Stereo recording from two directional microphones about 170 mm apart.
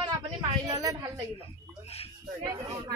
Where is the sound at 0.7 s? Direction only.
20° right (ahead or behind).